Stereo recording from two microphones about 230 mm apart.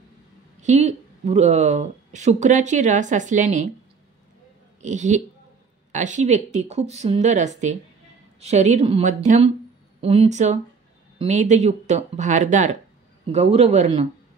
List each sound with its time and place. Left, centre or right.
0.6 s speech: right
4.8 s speech: right